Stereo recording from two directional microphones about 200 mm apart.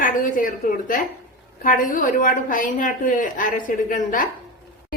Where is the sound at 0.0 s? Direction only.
40° left (ahead or behind).